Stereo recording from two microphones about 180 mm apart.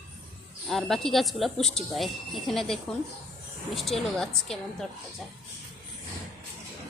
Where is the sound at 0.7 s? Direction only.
Centre (ahead or behind).